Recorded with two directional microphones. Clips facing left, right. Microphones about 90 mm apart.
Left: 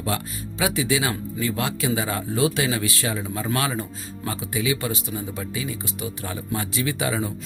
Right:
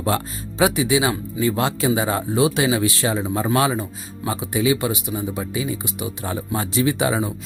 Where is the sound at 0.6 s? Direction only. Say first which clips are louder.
Right 5 dB; 20° right (ahead or behind).